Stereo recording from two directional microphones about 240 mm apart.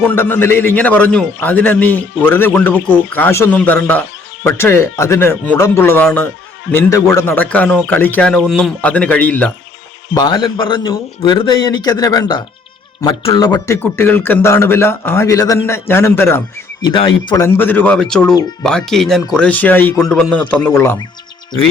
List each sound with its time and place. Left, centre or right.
0.0 s a man's voice: centre
10.2 s a man's voice: centre
16.8 s a man's voice: left